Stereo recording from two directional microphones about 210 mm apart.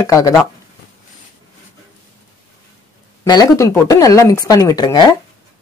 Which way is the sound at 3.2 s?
15° left (ahead or behind).